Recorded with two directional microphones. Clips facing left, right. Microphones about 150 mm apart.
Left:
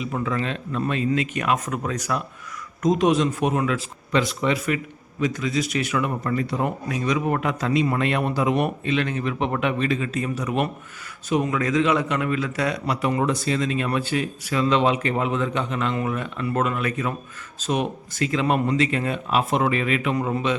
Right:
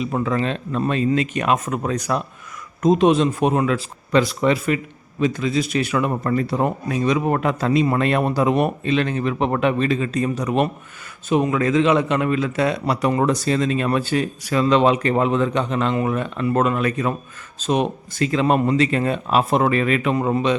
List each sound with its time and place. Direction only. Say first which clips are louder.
0.0 s speech: right 4 dB; 35° right (ahead or behind)
5.2 s a man's voice: right 4 dB; 25° right (ahead or behind)
13.0 s speech: right 3 dB; 40° right (ahead or behind)